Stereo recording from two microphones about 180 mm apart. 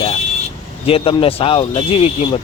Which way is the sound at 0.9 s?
30° left (ahead or behind).